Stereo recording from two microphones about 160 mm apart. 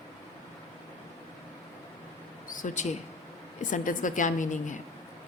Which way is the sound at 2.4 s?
55° left (ahead or behind).